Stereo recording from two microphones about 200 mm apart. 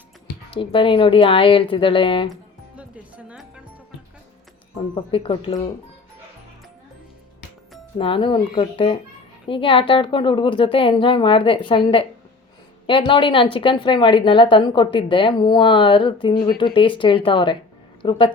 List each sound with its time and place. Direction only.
0.5 s a woman's voice: 25° left (ahead or behind)
2.3 s music: 5° right (ahead or behind)
4.9 s a woman's voice: 25° left (ahead or behind)
7.9 s a woman's voice: 25° left (ahead or behind)